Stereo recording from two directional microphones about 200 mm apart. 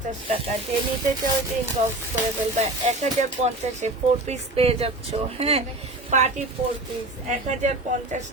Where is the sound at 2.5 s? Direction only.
35° right (ahead or behind).